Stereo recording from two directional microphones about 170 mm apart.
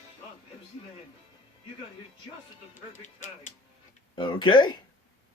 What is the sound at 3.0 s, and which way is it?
Music, 50° left (ahead or behind).